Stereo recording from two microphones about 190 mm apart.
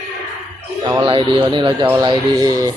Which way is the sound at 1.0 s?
25° right (ahead or behind).